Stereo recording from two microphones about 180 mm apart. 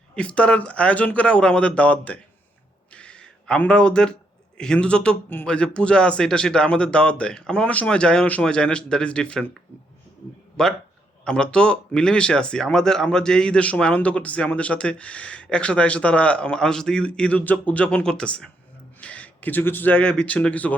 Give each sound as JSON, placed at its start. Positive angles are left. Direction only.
{"t": 0.2, "sound": "speech", "side_deg": 5}
{"t": 2.9, "sound": "a sound", "side_deg": 5}
{"t": 4.5, "sound": "speech", "side_deg": 5}
{"t": 10.6, "sound": "speech", "side_deg": 5}